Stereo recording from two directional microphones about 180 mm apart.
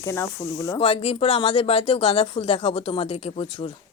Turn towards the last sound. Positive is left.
turn(degrees=30)  # may be behind; listen again after turning